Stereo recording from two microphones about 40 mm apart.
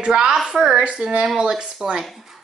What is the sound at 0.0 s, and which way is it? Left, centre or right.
A woman's voice, centre.